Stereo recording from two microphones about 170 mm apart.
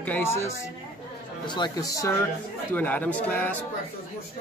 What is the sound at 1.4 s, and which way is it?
Speech, 25° left (ahead or behind).